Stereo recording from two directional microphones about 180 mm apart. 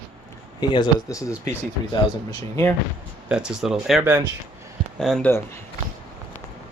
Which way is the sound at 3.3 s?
5° right (ahead or behind).